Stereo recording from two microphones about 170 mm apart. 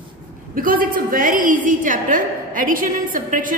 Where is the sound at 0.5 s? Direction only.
55° right (ahead or behind).